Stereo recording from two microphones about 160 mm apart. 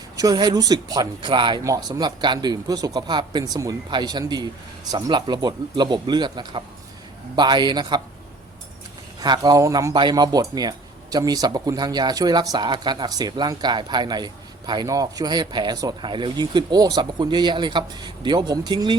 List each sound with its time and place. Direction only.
0.2 s speech: 25° right (ahead or behind)
9.2 s speech: 25° right (ahead or behind)